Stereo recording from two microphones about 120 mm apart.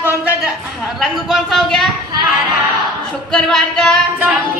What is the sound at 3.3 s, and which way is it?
Speech, 5° left (ahead or behind).